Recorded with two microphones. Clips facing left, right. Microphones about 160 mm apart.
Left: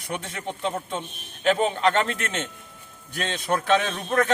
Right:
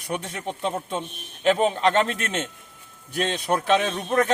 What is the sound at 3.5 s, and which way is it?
Speech, 15° right (ahead or behind).